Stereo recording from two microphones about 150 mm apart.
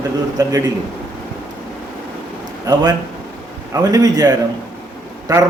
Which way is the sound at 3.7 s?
25° right (ahead or behind).